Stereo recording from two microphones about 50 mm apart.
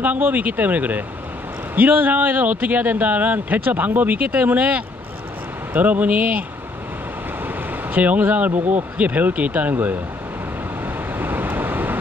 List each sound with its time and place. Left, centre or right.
0.0 s speech: right
7.4 s speech: right
11.1 s vehicle: right